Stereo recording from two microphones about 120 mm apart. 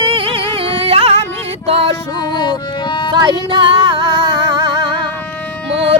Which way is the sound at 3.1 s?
40° right (ahead or behind).